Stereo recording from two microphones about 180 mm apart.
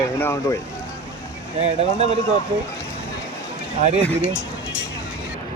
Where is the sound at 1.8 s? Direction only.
35° right (ahead or behind).